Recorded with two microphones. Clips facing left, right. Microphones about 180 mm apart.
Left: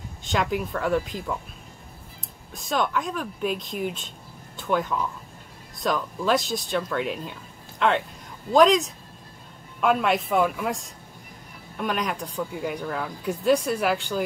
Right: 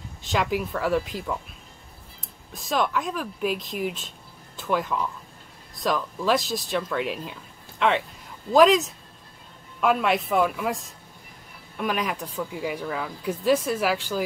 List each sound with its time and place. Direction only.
0.2 s speech: centre (ahead or behind)
2.5 s speech: centre (ahead or behind)